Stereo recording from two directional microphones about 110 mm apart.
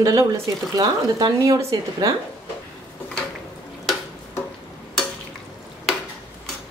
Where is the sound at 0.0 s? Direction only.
30° right (ahead or behind).